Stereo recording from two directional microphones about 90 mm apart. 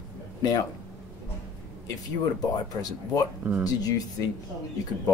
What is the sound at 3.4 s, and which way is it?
Speech, 20° right (ahead or behind).